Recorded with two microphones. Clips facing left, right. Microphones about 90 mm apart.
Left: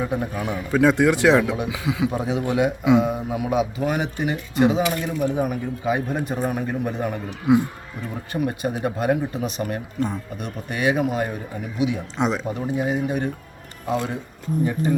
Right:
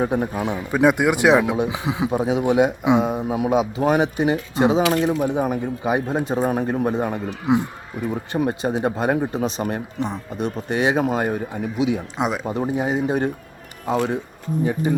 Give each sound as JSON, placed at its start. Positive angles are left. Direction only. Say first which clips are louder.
{"t": 0.1, "sound": "a man's voice", "louder": "right 3 dB", "side_deg": -25}
{"t": 6.9, "sound": "a man's voice", "louder": "right 3 dB", "side_deg": -30}
{"t": 11.8, "sound": "speech", "louder": "right 1 dB", "side_deg": -10}
{"t": 12.5, "sound": "a man's voice", "louder": "right 2 dB", "side_deg": -30}
{"t": 14.9, "sound": "a man's voice", "louder": "even", "side_deg": -40}